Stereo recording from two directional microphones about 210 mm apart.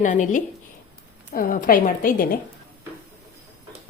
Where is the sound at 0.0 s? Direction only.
35° left (ahead or behind).